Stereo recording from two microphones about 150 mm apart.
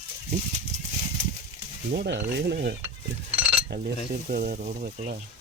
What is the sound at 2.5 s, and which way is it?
Speech, 90° right.